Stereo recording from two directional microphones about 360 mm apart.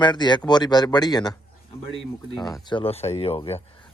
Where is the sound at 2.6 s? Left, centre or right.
Centre.